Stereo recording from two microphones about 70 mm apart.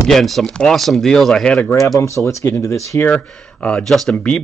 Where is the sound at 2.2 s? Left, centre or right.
Left.